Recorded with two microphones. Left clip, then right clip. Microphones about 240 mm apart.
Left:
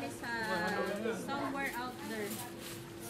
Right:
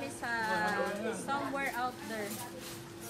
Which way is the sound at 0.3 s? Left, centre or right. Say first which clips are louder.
Right 3 dB; right.